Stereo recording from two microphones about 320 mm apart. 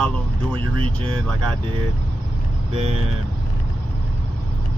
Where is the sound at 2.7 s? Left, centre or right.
Centre.